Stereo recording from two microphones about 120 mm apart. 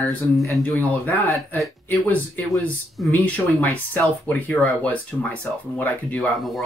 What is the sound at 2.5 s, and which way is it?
Speech, 5° left (ahead or behind).